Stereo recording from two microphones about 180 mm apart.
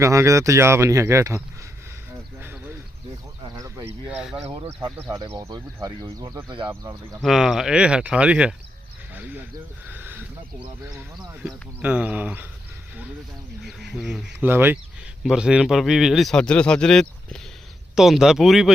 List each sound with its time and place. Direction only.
0.0 s speech: 15° right (ahead or behind)
3.4 s a sound: 20° right (ahead or behind)
4.1 s speech: 5° right (ahead or behind)
4.4 s speech: 25° right (ahead or behind)
4.9 s speech: 15° right (ahead or behind)
7.2 s speech: centre (ahead or behind)
9.9 s a sound: 10° right (ahead or behind)
11.4 s speech: 5° right (ahead or behind)
13.9 s speech: 5° right (ahead or behind)